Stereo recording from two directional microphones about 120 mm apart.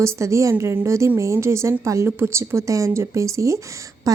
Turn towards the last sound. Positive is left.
turn(degrees=-25)  # may be behind; listen again after turning